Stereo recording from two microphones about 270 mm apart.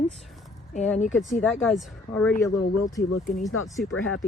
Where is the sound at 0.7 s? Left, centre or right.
Left.